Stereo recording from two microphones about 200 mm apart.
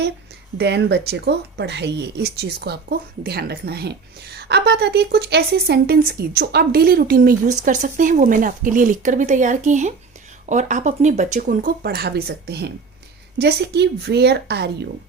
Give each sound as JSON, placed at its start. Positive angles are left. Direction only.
{"t": 0.6, "sound": "a woman's voice", "side_deg": -55}